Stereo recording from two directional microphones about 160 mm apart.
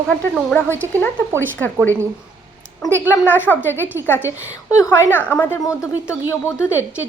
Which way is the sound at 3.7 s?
15° right (ahead or behind).